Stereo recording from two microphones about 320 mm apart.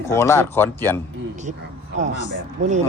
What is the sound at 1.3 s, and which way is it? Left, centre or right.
Speech, right.